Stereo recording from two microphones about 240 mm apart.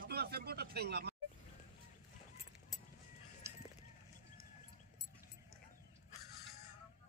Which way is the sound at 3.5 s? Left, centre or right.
Centre.